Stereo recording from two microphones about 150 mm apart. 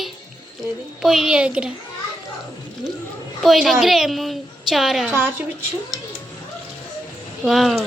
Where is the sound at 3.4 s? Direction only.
Centre (ahead or behind).